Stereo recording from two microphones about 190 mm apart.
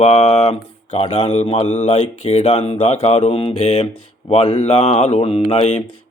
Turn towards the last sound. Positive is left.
turn(degrees=35)  # may be behind; listen again after turning